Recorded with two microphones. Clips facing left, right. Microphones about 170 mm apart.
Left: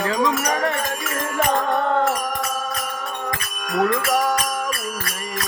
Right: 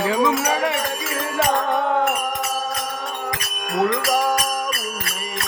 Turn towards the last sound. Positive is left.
turn(degrees=-15)  # may be behind; listen again after turning